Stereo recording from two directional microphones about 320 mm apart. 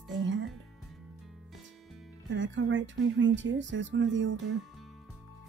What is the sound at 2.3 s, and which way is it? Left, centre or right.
Speech, right.